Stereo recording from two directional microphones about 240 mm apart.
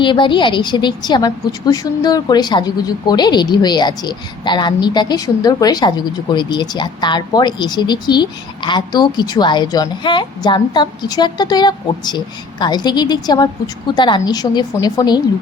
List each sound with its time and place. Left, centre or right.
0.0 s a woman's voice: centre